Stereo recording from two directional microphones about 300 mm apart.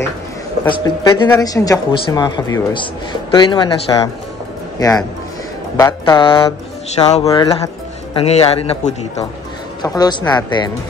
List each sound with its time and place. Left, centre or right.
0.7 s a woman's voice: centre